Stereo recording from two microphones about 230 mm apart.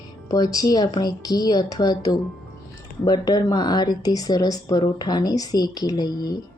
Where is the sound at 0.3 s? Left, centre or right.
Centre.